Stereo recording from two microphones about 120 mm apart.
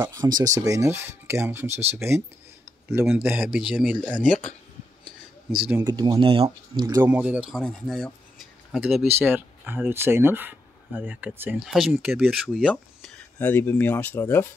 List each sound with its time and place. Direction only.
0.1 s speech: 30° right (ahead or behind)
2.9 s speech: 10° right (ahead or behind)
4.3 s speech: 10° left (ahead or behind)
5.8 s speech: 35° right (ahead or behind)
7.0 s speech: 10° right (ahead or behind)
7.6 s speech: 5° left (ahead or behind)
8.7 s speech: 5° right (ahead or behind)
9.3 s speech: 15° right (ahead or behind)
12.6 s speech: 10° left (ahead or behind)